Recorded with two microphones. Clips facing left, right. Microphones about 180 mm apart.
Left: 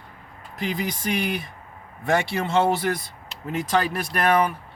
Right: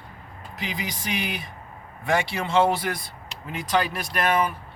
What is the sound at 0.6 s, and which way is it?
Speech, 50° left (ahead or behind).